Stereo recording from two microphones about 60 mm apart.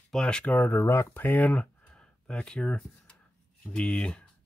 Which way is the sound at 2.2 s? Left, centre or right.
Centre.